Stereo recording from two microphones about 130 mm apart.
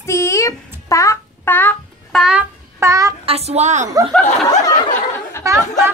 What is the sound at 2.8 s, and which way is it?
Speech, 25° right (ahead or behind).